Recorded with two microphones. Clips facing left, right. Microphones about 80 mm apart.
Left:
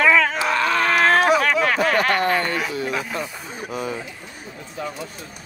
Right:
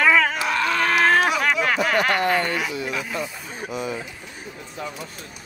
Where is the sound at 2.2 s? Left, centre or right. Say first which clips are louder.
Left 1 dB; left.